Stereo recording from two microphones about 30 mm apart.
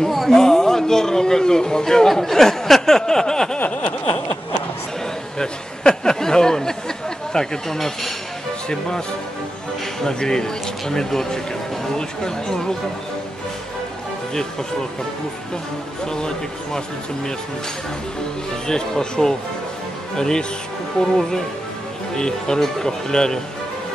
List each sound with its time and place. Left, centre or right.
0.3 s a man's voice: centre
2.0 s a sound: centre
3.5 s snicker: left
5.4 s speech: left
8.6 s speech: left
10.0 s speech: left
16.1 s speech: left
18.5 s speech: left